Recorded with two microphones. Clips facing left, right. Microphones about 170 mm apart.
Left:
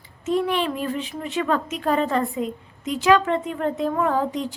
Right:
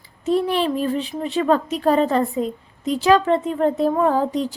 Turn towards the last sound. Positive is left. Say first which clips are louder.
# right 4 dB
turn(degrees=-35)  # may be behind; listen again after turning